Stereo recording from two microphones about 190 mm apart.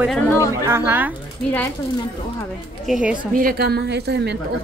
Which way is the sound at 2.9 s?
5° right (ahead or behind).